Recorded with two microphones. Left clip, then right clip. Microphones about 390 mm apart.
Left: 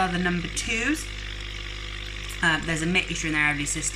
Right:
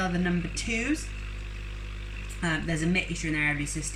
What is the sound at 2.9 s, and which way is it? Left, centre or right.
Speech, left.